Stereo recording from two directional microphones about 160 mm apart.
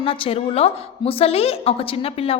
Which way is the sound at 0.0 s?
35° left (ahead or behind).